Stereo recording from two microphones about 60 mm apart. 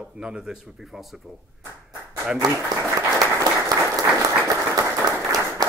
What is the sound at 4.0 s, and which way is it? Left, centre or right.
Applause, right.